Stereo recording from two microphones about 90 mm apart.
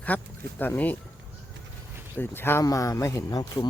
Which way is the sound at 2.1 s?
25° left (ahead or behind).